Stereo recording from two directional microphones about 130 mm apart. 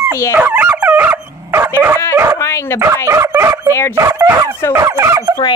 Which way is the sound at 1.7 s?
15° right (ahead or behind).